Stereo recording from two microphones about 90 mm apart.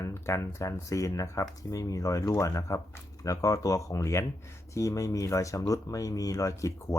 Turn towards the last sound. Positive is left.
turn(degrees=35)  # may be behind; listen again after turning